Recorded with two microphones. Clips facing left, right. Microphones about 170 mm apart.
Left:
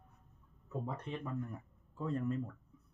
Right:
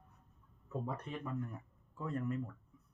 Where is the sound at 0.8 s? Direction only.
25° left (ahead or behind).